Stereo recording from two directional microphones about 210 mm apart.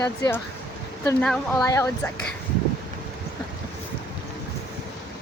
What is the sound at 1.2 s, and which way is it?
Speech, 5° left (ahead or behind).